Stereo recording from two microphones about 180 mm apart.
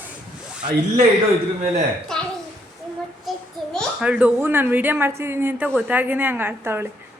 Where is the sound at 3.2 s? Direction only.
Centre (ahead or behind).